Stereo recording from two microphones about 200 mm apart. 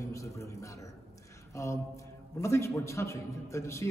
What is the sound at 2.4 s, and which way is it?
A man's voice, 15° left (ahead or behind).